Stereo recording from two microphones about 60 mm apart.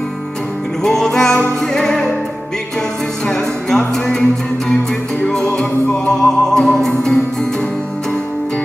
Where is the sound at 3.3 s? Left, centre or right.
Centre.